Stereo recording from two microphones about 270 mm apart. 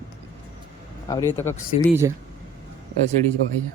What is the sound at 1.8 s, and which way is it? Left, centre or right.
Speech, centre.